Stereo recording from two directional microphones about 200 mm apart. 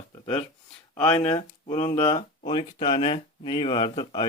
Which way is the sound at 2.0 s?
20° left (ahead or behind).